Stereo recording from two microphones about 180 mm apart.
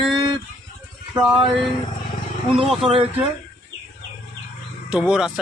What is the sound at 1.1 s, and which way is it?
Speech, centre (ahead or behind).